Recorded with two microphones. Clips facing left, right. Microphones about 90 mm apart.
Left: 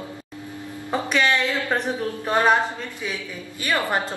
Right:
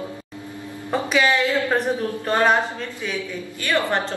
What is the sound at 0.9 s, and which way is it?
A woman's voice, 5° right (ahead or behind).